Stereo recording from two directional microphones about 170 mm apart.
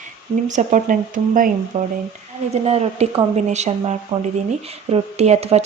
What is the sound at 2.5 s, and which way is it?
Speech, 40° right (ahead or behind).